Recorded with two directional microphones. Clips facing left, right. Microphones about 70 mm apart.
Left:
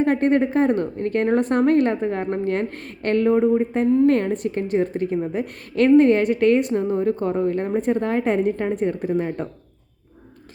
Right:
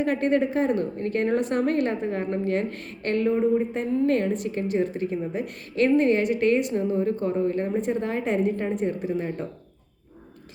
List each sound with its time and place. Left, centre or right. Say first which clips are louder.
0.0 s a woman's voice: left 4 dB; left